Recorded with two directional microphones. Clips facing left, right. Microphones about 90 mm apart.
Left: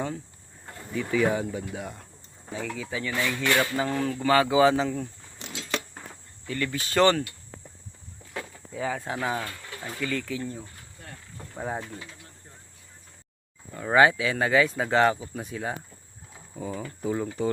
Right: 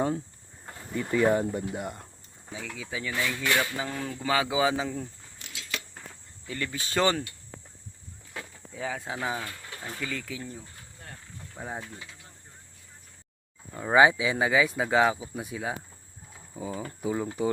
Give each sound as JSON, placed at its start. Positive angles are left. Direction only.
{"t": 0.9, "sound": "speech", "side_deg": -5}
{"t": 5.5, "sound": "a sound", "side_deg": 35}
{"t": 6.5, "sound": "speech", "side_deg": -15}
{"t": 8.3, "sound": "speech", "side_deg": 0}
{"t": 11.5, "sound": "speech", "side_deg": 20}
{"t": 13.7, "sound": "speech", "side_deg": -15}